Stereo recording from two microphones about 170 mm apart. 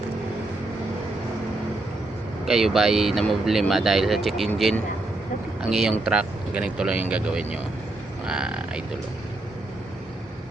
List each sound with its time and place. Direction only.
2.4 s speech: centre (ahead or behind)